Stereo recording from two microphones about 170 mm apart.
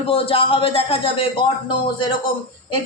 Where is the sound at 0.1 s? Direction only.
35° left (ahead or behind).